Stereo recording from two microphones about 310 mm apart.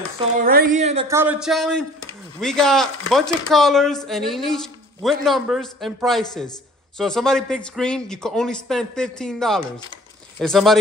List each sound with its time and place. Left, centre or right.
0.5 s a woman's voice: right
1.0 s speech: centre